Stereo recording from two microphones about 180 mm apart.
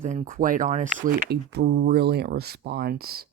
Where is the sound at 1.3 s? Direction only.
65° right (ahead or behind).